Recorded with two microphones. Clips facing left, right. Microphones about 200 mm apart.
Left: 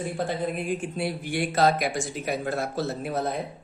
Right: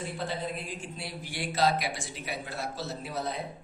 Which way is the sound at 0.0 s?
50° left (ahead or behind).